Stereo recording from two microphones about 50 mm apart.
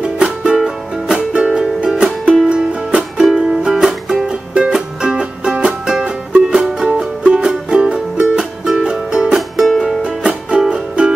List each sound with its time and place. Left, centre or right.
0.2 s music: centre
9.6 s music: centre
10.0 s music: centre